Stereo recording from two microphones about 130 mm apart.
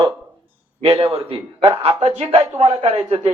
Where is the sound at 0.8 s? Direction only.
50° right (ahead or behind).